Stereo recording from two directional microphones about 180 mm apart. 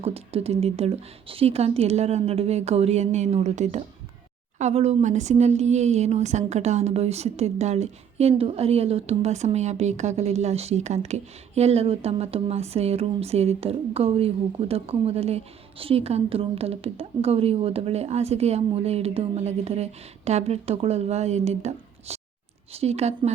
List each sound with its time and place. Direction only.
0.0 s speech: 35° right (ahead or behind)